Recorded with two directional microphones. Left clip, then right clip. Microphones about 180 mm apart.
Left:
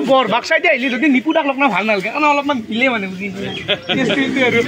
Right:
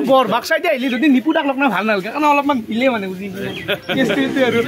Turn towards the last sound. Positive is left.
turn(degrees=-20)  # may be behind; listen again after turning